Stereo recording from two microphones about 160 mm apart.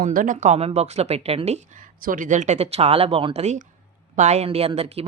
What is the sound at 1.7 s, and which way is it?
Speech, 60° right (ahead or behind).